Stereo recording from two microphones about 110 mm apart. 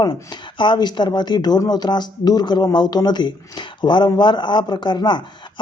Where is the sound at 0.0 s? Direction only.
40° left (ahead or behind).